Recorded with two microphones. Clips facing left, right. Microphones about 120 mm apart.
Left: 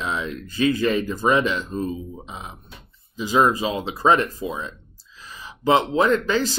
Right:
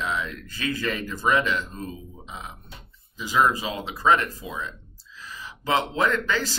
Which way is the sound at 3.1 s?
25° left (ahead or behind).